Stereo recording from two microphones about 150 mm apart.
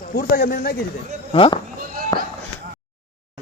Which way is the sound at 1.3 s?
35° left (ahead or behind).